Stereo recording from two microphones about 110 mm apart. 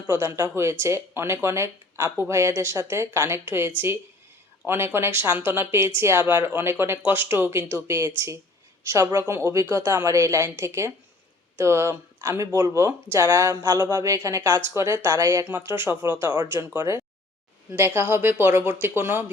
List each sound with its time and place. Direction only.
0.1 s speech: 25° right (ahead or behind)
4.6 s speech: 20° right (ahead or behind)
15.4 s speech: 20° right (ahead or behind)